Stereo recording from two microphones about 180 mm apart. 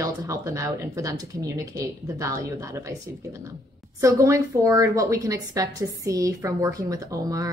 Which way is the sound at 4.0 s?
15° right (ahead or behind).